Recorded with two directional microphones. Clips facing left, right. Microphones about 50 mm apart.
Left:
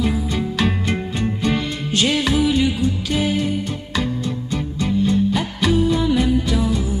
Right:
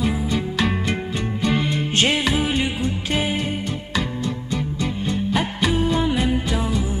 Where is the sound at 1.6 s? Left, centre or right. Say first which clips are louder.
Even; right.